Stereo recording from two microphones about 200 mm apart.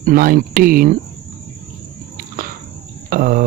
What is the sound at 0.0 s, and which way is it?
Speech, 45° right (ahead or behind).